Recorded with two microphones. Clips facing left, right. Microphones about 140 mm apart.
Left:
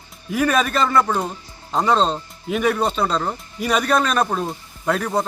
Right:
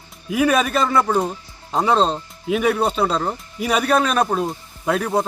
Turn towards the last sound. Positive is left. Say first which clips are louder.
# right 1 dB
turn(degrees=-5)  # may be behind; listen again after turning